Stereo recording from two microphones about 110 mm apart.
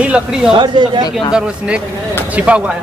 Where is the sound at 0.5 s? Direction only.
45° right (ahead or behind).